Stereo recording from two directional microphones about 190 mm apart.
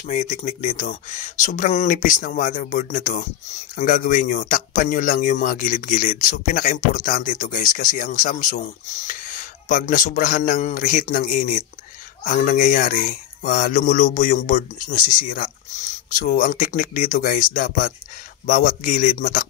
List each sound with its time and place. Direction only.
0.0 s speech: 40° left (ahead or behind)